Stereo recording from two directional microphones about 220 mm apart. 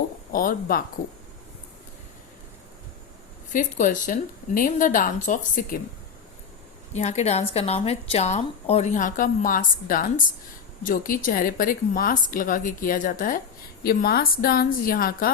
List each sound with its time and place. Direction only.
0.3 s a woman's voice: 40° left (ahead or behind)
3.5 s a woman's voice: 35° left (ahead or behind)
6.9 s a woman's voice: 30° left (ahead or behind)